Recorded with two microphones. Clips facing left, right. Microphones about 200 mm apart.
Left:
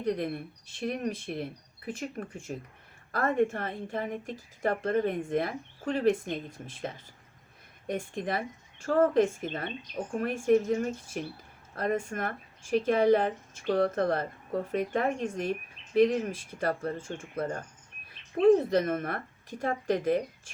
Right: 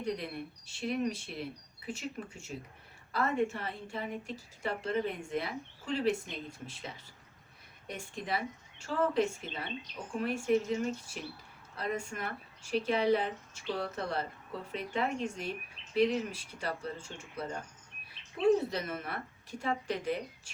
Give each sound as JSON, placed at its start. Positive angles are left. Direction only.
{"t": 0.0, "sound": "speech", "side_deg": 50}